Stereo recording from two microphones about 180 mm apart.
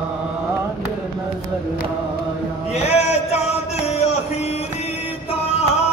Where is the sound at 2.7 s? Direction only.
35° left (ahead or behind).